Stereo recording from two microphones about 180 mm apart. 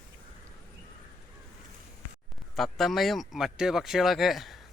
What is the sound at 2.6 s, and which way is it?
Speech, centre (ahead or behind).